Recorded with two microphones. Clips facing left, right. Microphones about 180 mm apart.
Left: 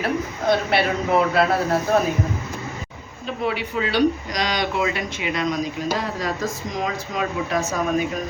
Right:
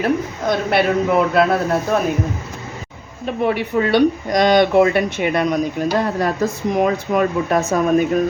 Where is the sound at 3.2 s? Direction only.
55° right (ahead or behind).